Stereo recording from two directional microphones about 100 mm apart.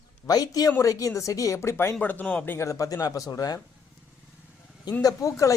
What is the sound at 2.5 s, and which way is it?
Speech, 30° left (ahead or behind).